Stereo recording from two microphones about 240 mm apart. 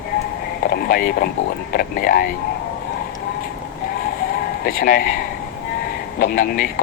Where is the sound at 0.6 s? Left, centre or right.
Left.